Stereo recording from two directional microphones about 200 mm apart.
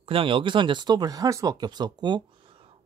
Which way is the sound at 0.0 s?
25° right (ahead or behind).